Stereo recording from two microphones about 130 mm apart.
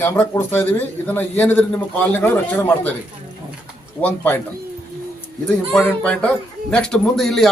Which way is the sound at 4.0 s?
15° left (ahead or behind).